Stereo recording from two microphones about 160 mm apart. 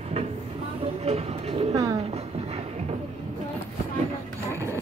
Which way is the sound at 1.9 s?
40° right (ahead or behind).